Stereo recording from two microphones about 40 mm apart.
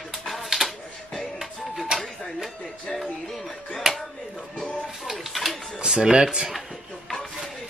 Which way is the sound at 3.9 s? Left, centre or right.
Centre.